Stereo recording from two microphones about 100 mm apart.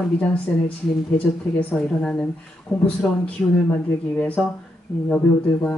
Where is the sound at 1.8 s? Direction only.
5° left (ahead or behind).